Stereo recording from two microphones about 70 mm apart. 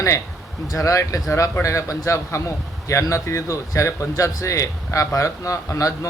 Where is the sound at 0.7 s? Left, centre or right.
Left.